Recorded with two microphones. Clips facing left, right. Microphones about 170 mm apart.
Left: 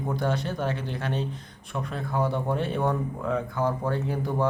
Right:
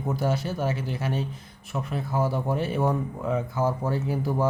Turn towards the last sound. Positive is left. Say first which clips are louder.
# right 1 dB
turn(degrees=-5)  # may be behind; listen again after turning